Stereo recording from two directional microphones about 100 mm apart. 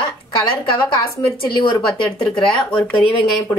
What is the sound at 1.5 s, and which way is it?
Speech, 50° left (ahead or behind).